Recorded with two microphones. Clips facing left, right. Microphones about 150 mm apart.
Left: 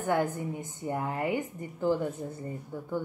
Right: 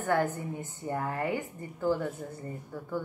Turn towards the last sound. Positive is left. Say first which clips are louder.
# left 2 dB
turn(degrees=15)  # may be behind; listen again after turning